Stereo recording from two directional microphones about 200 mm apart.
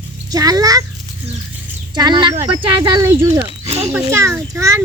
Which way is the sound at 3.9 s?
15° right (ahead or behind).